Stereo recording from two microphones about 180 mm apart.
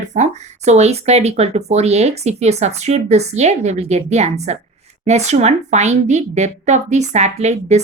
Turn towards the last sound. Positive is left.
turn(degrees=-40)  # may be behind; listen again after turning